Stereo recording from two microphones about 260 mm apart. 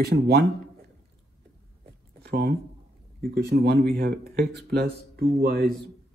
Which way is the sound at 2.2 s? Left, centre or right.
Right.